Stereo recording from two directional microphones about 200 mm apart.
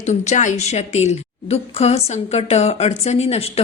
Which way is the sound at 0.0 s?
35° left (ahead or behind).